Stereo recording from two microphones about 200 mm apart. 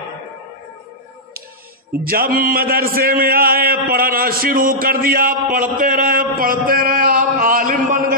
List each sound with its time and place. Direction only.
2.0 s a man's voice: 45° right (ahead or behind)